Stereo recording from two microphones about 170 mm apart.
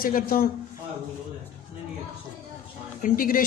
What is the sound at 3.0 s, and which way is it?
Speech, 55° left (ahead or behind).